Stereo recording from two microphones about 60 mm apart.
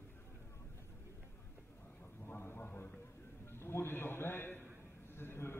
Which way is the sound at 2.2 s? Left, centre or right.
Left.